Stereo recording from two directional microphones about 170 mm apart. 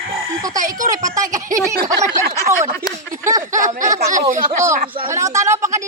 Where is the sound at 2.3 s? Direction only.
15° right (ahead or behind).